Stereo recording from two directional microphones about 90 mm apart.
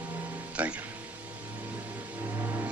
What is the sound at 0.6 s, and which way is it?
Speech, 15° right (ahead or behind).